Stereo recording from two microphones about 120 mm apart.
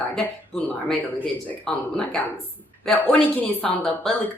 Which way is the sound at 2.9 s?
5° left (ahead or behind).